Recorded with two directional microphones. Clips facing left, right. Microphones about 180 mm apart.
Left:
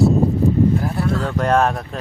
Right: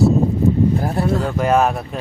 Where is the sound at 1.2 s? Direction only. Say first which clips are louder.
Even; 5° right (ahead or behind).